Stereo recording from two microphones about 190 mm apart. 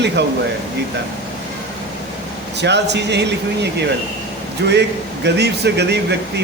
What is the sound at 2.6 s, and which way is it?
Speech, 65° right (ahead or behind).